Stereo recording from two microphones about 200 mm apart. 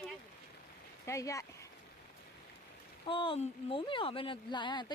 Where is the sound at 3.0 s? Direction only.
25° left (ahead or behind).